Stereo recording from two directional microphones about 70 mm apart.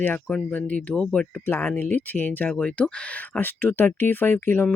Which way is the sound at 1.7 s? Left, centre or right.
Left.